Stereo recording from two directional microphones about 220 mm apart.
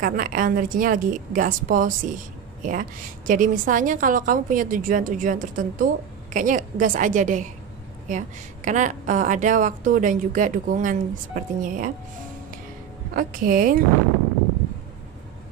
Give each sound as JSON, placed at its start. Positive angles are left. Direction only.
{"t": 0.0, "sound": "a woman's voice", "side_deg": -40}
{"t": 13.1, "sound": "a woman's voice", "side_deg": -40}